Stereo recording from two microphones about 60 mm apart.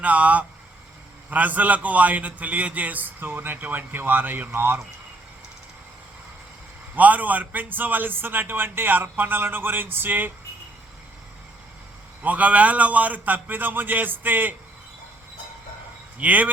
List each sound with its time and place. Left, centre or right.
0.0 s a man's voice: right
6.9 s a man's voice: right
12.2 s a man's voice: right
16.1 s a man's voice: right